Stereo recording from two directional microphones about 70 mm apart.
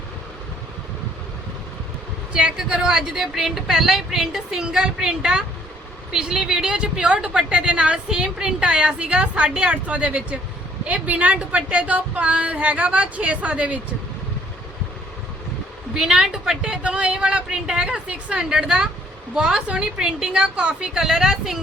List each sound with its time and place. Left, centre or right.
2.3 s a woman's voice: centre
16.0 s a woman's voice: centre